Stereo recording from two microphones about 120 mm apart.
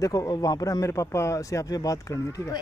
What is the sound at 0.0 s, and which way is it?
Speech, 30° left (ahead or behind).